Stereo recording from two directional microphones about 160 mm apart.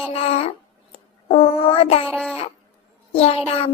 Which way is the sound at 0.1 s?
40° left (ahead or behind).